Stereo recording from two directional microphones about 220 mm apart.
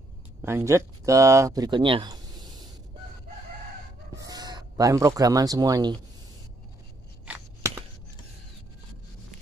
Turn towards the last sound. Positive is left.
turn(degrees=-5)  # may be behind; listen again after turning